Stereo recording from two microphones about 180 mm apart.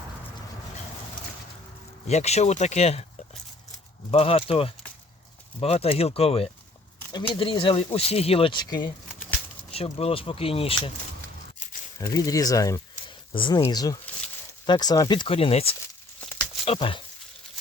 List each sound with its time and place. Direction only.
2.0 s speech: 35° left (ahead or behind)
4.1 s speech: 35° left (ahead or behind)
11.9 s speech: 20° left (ahead or behind)